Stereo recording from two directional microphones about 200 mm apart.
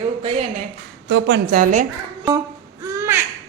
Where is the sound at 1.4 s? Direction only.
40° right (ahead or behind).